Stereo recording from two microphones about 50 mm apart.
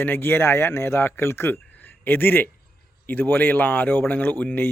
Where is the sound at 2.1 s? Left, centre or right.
Left.